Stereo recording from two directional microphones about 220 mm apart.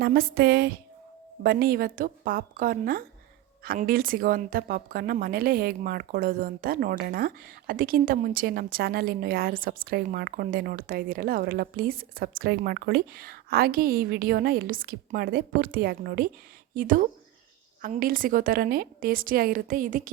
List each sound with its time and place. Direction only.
0.0 s a woman's voice: 45° right (ahead or behind)